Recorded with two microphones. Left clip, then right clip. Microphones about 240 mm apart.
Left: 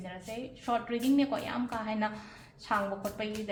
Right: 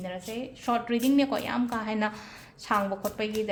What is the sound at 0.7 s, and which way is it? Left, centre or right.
A woman's voice, right.